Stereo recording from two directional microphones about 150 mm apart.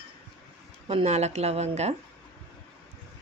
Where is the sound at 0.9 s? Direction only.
45° right (ahead or behind).